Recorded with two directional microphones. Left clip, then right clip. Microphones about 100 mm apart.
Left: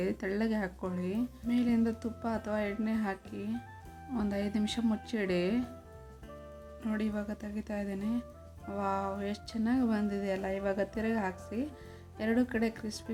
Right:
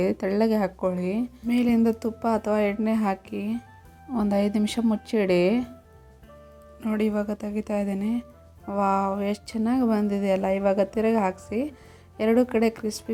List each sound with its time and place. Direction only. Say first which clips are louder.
0.0 s a woman's voice: right 10 dB; 40° right (ahead or behind)
6.8 s a woman's voice: right 10 dB; 40° right (ahead or behind)